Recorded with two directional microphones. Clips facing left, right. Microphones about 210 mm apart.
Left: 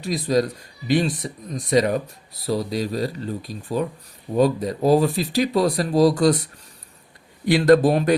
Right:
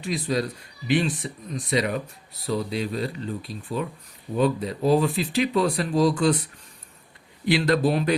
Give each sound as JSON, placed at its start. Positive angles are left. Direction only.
{"t": 0.0, "sound": "speech", "side_deg": 40}
{"t": 7.4, "sound": "speech", "side_deg": 45}